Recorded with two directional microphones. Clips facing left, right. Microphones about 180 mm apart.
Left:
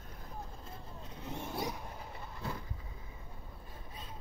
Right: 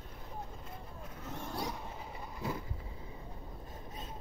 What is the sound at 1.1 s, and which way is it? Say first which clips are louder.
Vehicle: left 1 dB; 15° left (ahead or behind).